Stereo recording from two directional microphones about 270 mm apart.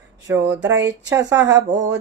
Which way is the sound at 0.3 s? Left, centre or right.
Centre.